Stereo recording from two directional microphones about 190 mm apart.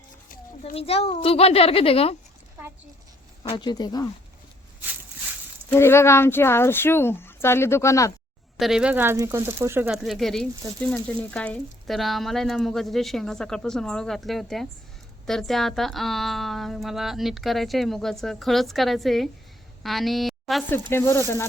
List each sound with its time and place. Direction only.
0.6 s a child's voice: 30° left (ahead or behind)
3.5 s speech: 25° left (ahead or behind)
5.6 s speech: 15° left (ahead or behind)
8.5 s a woman's voice: centre (ahead or behind)
20.9 s speech: 15° left (ahead or behind)